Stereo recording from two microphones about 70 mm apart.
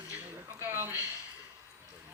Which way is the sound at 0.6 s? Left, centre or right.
Right.